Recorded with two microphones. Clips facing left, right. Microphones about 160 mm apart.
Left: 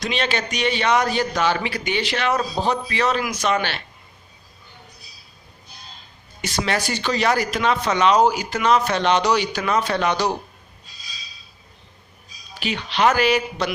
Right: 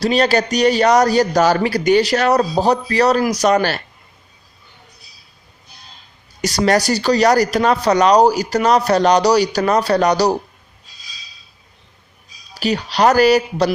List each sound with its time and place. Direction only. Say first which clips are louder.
0.0 s speech: right 9 dB; 40° right (ahead or behind)
6.4 s speech: right 8 dB; 40° right (ahead or behind)
12.5 s speech: right 6 dB; 40° right (ahead or behind)